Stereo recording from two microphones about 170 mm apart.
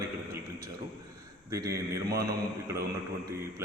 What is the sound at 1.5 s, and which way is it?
A man's voice, 20° right (ahead or behind).